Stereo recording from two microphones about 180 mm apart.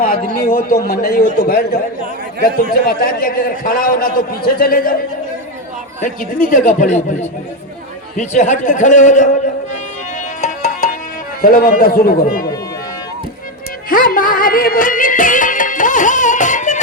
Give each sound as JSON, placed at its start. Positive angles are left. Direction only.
{"t": 0.0, "sound": "a man's voice", "side_deg": 50}
{"t": 6.0, "sound": "a man's voice", "side_deg": 50}
{"t": 11.4, "sound": "a man's voice", "side_deg": 55}
{"t": 13.9, "sound": "music", "side_deg": 50}